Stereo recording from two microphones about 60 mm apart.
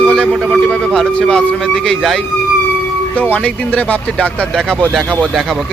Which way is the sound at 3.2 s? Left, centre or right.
Left.